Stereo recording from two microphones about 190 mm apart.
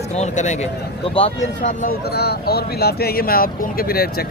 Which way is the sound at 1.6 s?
45° left (ahead or behind).